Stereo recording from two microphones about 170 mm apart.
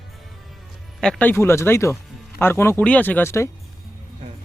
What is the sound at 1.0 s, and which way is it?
Speech, 5° left (ahead or behind).